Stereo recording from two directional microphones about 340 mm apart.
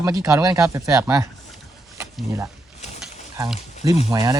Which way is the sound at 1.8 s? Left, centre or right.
Centre.